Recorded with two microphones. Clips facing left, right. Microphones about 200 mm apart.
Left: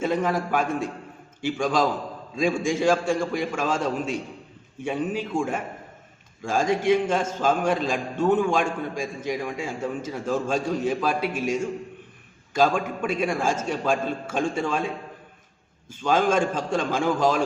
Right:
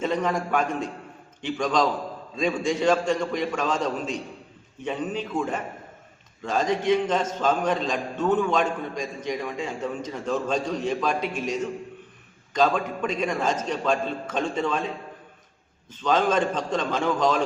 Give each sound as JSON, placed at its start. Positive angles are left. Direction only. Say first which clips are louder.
{"t": 0.0, "sound": "a man's voice", "louder": "left 1 dB", "side_deg": 5}